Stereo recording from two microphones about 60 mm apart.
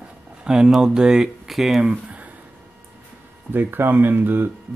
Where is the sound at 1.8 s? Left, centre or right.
Centre.